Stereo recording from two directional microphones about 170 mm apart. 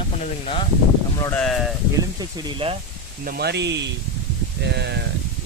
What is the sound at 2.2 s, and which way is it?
Speech, 30° right (ahead or behind).